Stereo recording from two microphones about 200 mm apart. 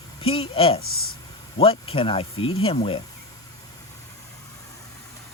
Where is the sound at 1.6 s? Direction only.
25° left (ahead or behind).